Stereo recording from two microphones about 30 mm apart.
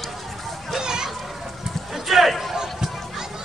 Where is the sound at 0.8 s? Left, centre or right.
Right.